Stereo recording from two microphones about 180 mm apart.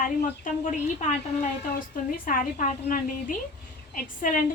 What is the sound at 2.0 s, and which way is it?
A woman's voice, 50° left (ahead or behind).